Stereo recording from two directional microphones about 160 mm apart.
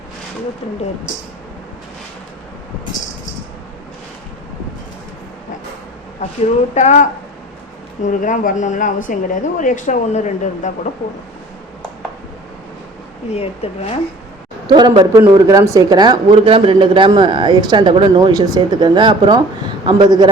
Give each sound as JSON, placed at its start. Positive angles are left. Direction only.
{"t": 6.7, "sound": "speech", "side_deg": 50}
{"t": 8.2, "sound": "speech", "side_deg": 55}
{"t": 13.3, "sound": "speech", "side_deg": 40}
{"t": 14.7, "sound": "a man's voice", "side_deg": -25}